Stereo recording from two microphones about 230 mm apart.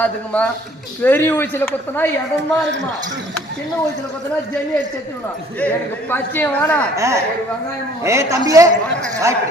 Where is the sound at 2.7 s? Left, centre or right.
Right.